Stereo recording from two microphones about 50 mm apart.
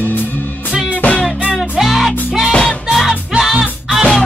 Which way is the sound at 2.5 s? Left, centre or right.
Centre.